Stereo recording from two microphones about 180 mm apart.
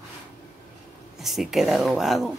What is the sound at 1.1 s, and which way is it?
Speech, centre (ahead or behind).